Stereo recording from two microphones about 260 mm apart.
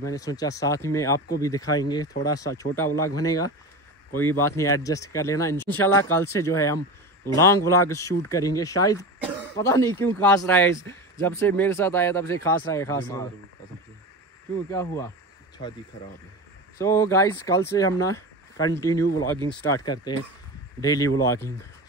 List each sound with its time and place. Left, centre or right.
0.0 s speech: centre
14.7 s speech: centre
16.7 s speech: centre